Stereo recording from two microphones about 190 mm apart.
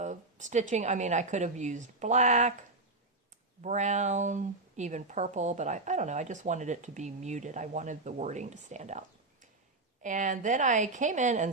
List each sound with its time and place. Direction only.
0.0 s speech: 40° right (ahead or behind)
3.6 s speech: 40° right (ahead or behind)